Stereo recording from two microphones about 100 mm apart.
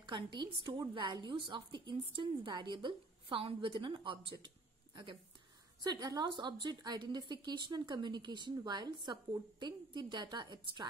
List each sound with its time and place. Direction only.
0.0 s a woman's voice: 55° right (ahead or behind)
5.9 s a woman's voice: 40° right (ahead or behind)